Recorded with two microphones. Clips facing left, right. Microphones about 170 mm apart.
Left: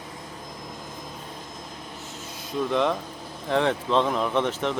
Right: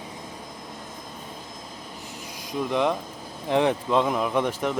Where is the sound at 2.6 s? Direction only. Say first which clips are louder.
Even; 15° right (ahead or behind).